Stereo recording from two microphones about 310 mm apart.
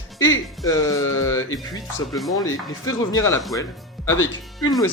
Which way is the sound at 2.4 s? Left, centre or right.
Left.